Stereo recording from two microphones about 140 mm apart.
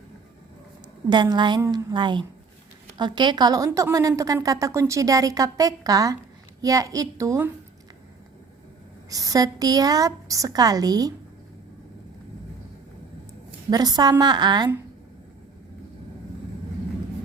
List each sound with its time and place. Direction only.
1.1 s a woman's voice: 30° right (ahead or behind)
9.0 s a woman's voice: 25° right (ahead or behind)
13.7 s a woman's voice: 30° right (ahead or behind)